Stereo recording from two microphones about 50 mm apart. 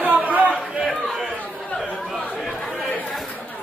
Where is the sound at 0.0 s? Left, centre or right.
Right.